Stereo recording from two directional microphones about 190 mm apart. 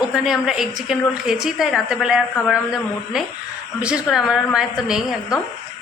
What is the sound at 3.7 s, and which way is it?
A woman's voice, 5° right (ahead or behind).